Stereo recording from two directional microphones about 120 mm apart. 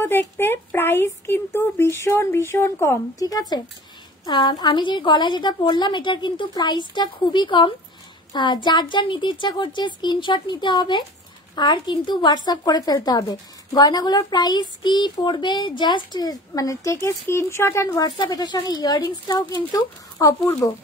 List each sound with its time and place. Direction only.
0.0 s a woman's voice: 20° left (ahead or behind)
18.1 s a woman's voice: 40° left (ahead or behind)